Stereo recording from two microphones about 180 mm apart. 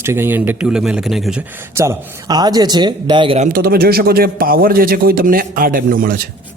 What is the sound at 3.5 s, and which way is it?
A man's voice, 55° right (ahead or behind).